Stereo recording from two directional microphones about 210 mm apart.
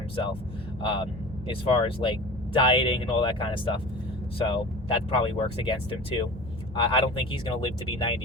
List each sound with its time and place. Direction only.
0.8 s speech: 25° left (ahead or behind)